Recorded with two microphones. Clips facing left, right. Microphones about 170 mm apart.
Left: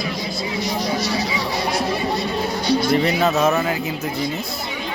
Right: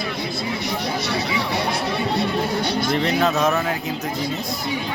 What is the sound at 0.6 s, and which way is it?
Speech, 60° right (ahead or behind).